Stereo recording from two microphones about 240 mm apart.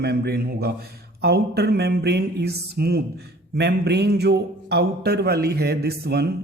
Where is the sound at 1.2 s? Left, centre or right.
Right.